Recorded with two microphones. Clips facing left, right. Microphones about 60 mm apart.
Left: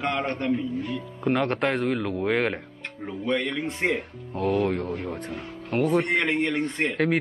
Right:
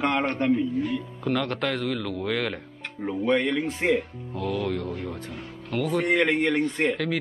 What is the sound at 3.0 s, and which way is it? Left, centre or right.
Speech, centre.